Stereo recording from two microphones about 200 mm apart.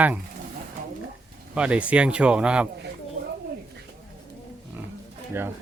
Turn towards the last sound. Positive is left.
turn(degrees=-10)  # may be behind; listen again after turning